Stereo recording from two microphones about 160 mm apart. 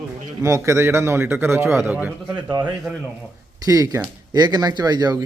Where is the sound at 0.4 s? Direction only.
20° right (ahead or behind).